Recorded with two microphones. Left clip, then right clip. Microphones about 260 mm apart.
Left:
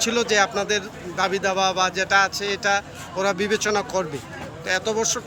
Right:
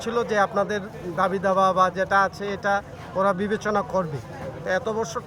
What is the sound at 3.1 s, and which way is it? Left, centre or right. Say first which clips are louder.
Speech: even; right.